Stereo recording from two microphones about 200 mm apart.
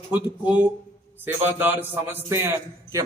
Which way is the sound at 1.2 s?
10° right (ahead or behind).